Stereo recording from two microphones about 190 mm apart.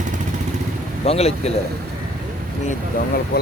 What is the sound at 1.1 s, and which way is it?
Speech, 35° left (ahead or behind).